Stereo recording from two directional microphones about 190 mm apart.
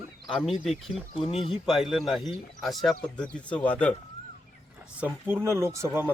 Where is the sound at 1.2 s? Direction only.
30° left (ahead or behind).